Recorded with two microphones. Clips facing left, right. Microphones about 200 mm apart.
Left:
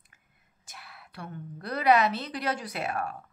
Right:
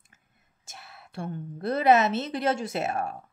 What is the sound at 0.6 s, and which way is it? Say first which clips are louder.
A woman's voice: right 1 dB; 25° right (ahead or behind).